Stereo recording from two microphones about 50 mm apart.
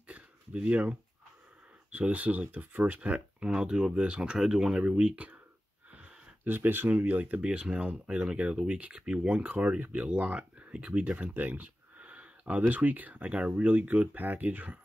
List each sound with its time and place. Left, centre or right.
0.1 s a sound: right
1.9 s speech: right; by 4.8 s centre
4.8 s speech: right
6.4 s speech: right
7.4 s speech: centre